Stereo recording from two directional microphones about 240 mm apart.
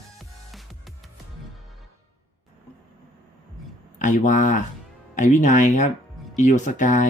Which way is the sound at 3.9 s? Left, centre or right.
Left.